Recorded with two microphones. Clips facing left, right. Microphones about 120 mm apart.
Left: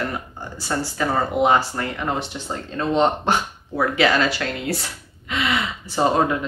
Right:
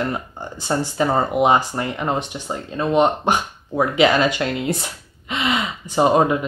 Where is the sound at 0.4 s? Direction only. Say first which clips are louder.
Right 3 dB; 20° right (ahead or behind).